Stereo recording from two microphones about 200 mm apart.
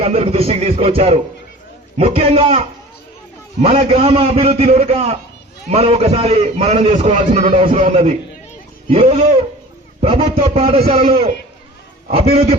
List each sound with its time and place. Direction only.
0.0 s a man's voice: 30° right (ahead or behind)
12.1 s a man's voice: 30° right (ahead or behind)